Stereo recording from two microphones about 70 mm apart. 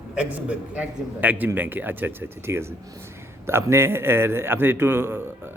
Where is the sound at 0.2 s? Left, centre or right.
Centre.